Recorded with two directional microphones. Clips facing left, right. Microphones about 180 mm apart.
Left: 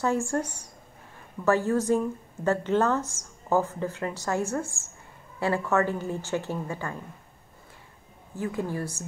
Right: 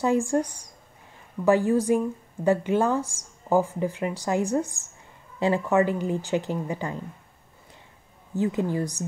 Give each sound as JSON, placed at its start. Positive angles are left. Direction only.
{"t": 0.0, "sound": "a woman's voice", "side_deg": -15}
{"t": 8.4, "sound": "a woman's voice", "side_deg": -20}